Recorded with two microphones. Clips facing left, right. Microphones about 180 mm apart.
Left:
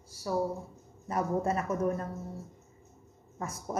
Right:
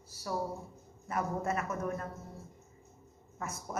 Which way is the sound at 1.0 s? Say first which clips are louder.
Left 4 dB; 30° left (ahead or behind).